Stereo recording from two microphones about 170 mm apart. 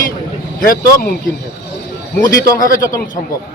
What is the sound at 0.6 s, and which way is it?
Speech, 60° left (ahead or behind).